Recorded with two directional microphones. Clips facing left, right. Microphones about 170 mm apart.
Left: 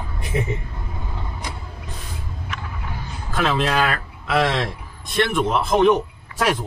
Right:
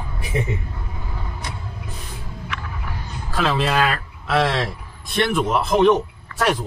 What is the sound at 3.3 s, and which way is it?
A man's voice, centre (ahead or behind).